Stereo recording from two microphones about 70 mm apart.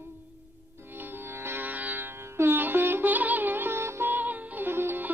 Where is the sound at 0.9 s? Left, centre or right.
Right.